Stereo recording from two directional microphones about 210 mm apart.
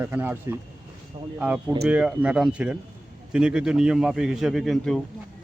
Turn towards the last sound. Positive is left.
turn(degrees=0)  # may be behind; listen again after turning